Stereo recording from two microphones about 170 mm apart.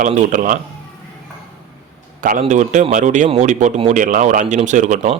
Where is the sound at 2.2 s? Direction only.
50° right (ahead or behind).